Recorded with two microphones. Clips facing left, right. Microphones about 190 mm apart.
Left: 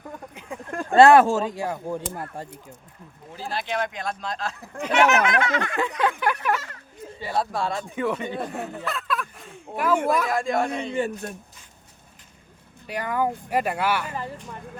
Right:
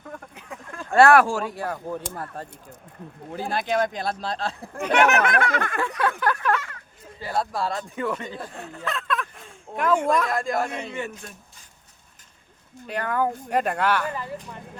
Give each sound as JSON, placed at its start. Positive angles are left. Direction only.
{"t": 0.9, "sound": "speech", "side_deg": 20}
{"t": 3.3, "sound": "speech", "side_deg": -55}
{"t": 4.8, "sound": "speech", "side_deg": -55}
{"t": 5.7, "sound": "a sound", "side_deg": 15}
{"t": 7.2, "sound": "a man's voice", "side_deg": 0}
{"t": 8.4, "sound": "speech", "side_deg": 65}
{"t": 8.8, "sound": "fowl", "side_deg": 0}
{"t": 10.1, "sound": "a man's voice", "side_deg": 5}
{"t": 10.9, "sound": "speech", "side_deg": 35}
{"t": 12.9, "sound": "speech", "side_deg": 10}